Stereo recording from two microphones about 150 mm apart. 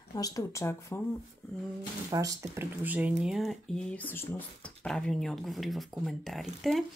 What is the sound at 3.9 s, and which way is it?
Speech, 15° left (ahead or behind).